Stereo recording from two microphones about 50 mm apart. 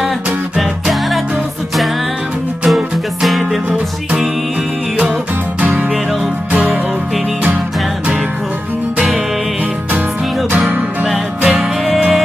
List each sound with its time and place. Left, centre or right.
0.6 s music: centre
2.7 s music: centre
6.5 s music: right
11.1 s music: centre